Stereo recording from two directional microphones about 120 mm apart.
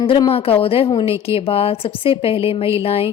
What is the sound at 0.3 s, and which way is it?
Speech, 55° left (ahead or behind).